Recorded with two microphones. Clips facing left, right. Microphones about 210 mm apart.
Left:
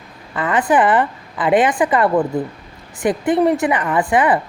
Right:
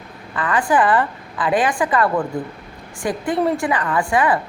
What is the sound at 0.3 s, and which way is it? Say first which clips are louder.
Speech: left 2 dB; 20° left (ahead or behind).